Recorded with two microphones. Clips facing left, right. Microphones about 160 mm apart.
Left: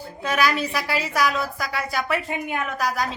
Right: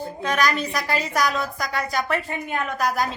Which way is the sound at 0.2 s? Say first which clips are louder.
Left 1 dB; 5° left (ahead or behind).